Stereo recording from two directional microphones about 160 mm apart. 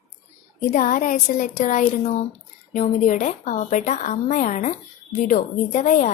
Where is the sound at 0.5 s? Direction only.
55° left (ahead or behind).